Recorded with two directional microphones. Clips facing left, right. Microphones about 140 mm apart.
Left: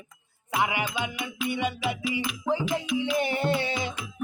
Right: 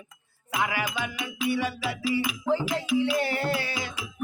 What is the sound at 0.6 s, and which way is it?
Music, 20° left (ahead or behind).